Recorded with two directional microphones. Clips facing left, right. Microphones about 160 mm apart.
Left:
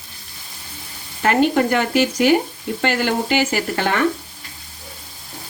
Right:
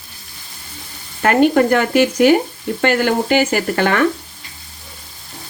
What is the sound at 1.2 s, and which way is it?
Speech, 50° right (ahead or behind).